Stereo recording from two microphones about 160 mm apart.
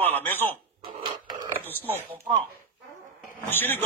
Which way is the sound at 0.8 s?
30° right (ahead or behind).